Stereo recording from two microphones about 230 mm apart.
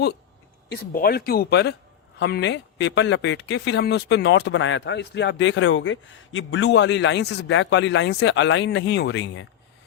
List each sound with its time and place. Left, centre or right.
0.7 s speech: left